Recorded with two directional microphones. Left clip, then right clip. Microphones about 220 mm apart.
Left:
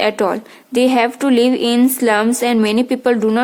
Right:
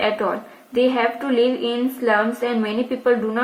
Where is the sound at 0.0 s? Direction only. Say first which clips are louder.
Left 5 dB; 40° left (ahead or behind).